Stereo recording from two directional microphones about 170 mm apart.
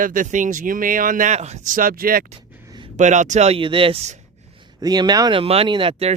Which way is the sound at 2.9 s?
45° right (ahead or behind).